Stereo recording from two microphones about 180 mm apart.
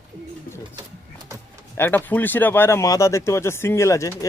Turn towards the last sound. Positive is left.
turn(degrees=15)  # may be behind; listen again after turning